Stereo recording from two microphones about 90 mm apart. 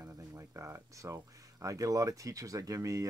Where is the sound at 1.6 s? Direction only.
40° right (ahead or behind).